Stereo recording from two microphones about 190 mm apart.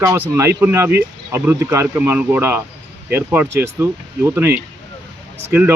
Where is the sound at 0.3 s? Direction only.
15° right (ahead or behind).